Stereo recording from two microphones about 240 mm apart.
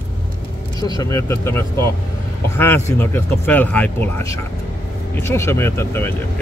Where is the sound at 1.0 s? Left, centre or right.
Centre.